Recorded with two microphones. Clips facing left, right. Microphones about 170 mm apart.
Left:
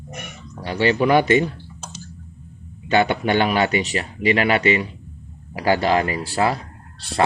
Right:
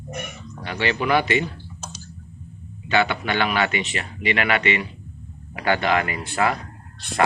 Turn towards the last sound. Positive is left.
turn(degrees=30)  # may be behind; listen again after turning